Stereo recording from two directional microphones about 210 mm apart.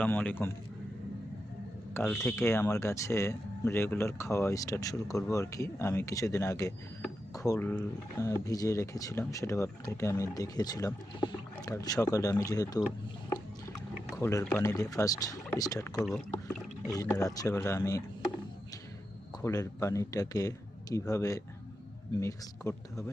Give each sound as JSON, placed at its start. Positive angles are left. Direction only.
{"t": 0.0, "sound": "speech", "side_deg": 5}
{"t": 1.9, "sound": "speech", "side_deg": 10}
{"t": 14.2, "sound": "speech", "side_deg": 15}
{"t": 16.0, "sound": "a sound", "side_deg": 5}
{"t": 16.9, "sound": "speech", "side_deg": 15}
{"t": 19.4, "sound": "speech", "side_deg": 15}